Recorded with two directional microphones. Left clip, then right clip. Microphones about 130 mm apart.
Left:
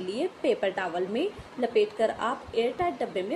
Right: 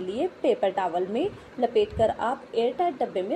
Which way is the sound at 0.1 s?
15° right (ahead or behind).